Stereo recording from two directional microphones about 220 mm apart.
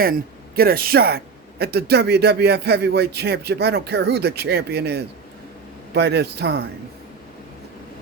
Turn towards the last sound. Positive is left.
turn(degrees=-50)  # may be behind; listen again after turning